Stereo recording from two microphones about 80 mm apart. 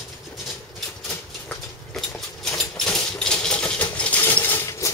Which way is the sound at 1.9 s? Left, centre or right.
Centre.